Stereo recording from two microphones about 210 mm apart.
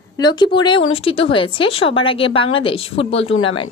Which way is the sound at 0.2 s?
20° left (ahead or behind).